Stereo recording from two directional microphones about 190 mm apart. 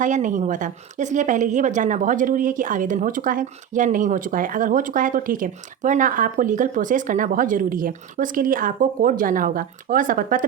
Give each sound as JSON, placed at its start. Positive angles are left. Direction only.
{"t": 0.0, "sound": "a woman's voice", "side_deg": -40}